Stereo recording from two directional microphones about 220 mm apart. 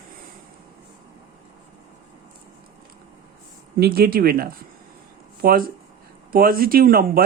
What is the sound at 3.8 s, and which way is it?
A man's voice, 45° right (ahead or behind).